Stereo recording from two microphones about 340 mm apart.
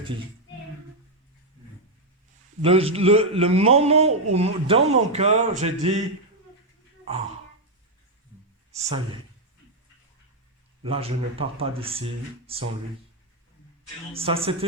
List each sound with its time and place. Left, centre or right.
2.6 s a man's voice: centre
8.7 s speech: centre
10.8 s a man's voice: centre
14.1 s a man's voice: centre